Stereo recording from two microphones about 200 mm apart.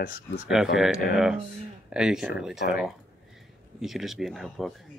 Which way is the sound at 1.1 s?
Centre (ahead or behind).